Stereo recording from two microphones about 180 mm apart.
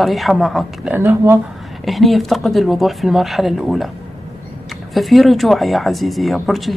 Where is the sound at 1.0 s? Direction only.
15° right (ahead or behind).